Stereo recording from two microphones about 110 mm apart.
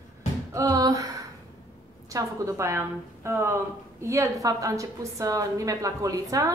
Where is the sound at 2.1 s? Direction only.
30° right (ahead or behind).